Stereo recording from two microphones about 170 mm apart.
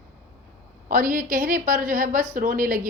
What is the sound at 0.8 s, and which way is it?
A woman's voice, 55° right (ahead or behind).